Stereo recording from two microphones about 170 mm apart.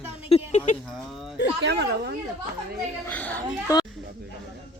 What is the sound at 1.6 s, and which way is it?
Speech, 80° right.